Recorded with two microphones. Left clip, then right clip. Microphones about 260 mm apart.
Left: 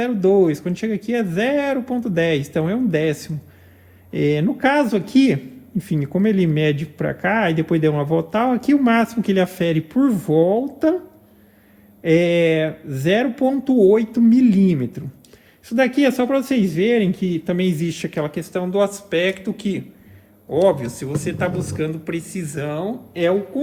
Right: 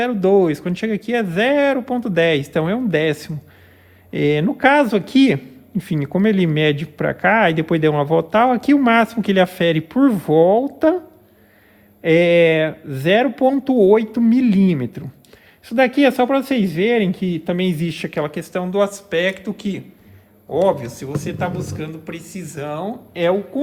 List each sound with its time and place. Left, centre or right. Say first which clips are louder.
0.0 s a man's voice: right 1 dB; right
12.0 s a man's voice: right 3 dB; right